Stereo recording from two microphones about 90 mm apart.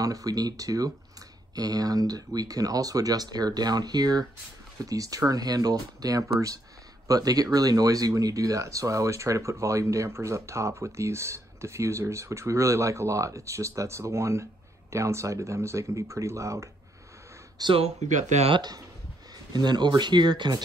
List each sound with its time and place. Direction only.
0.0 s speech: 40° right (ahead or behind)
17.6 s speech: 45° right (ahead or behind)